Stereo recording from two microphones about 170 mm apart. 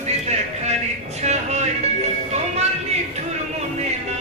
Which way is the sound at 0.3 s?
40° right (ahead or behind).